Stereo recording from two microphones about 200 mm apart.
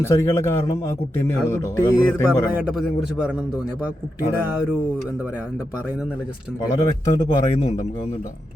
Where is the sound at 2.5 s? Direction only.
5° right (ahead or behind).